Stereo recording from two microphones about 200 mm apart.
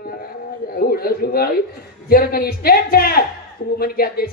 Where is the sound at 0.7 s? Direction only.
50° left (ahead or behind).